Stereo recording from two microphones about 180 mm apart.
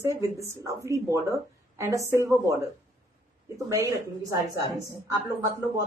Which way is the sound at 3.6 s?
20° right (ahead or behind).